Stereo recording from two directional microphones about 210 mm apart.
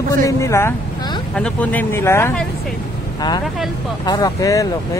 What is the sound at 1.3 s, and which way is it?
Speech, 5° left (ahead or behind).